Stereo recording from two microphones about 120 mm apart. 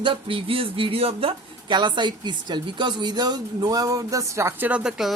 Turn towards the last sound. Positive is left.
turn(degrees=-5)  # may be behind; listen again after turning